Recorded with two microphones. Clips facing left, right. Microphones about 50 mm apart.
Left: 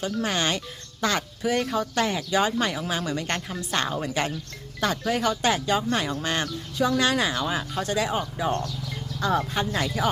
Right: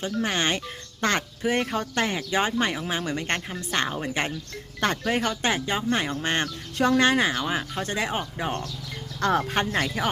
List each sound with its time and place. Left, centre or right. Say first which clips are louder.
0.0 s speech: even; right
3.3 s a woman's voice: even; centre
4.8 s speech: even; right
6.7 s speech: right 2 dB; right
7.0 s speech: right 2 dB; right
7.9 s speech: left 2 dB; right
9.2 s speech: right 1 dB; right
9.7 s speech: even; right